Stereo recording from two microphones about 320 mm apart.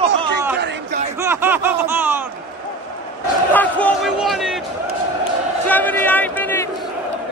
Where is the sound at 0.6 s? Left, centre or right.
Right.